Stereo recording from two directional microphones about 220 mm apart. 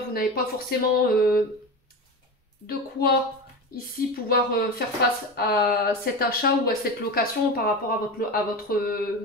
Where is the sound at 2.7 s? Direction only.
45° left (ahead or behind).